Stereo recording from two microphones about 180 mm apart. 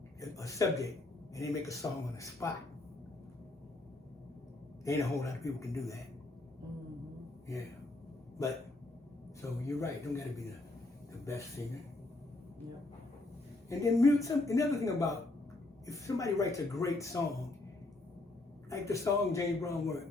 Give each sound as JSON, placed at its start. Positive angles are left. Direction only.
{"t": 0.2, "sound": "a man's voice", "side_deg": 15}
{"t": 4.9, "sound": "a man's voice", "side_deg": 15}
{"t": 8.4, "sound": "a man's voice", "side_deg": 20}
{"t": 13.7, "sound": "a man's voice", "side_deg": 15}
{"t": 18.7, "sound": "a man's voice", "side_deg": 15}